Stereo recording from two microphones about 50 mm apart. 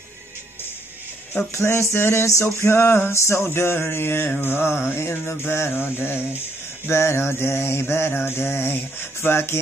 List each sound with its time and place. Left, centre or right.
1.5 s a sound: left
2.4 s male singing: left
3.5 s mantra: left
6.9 s mantra: left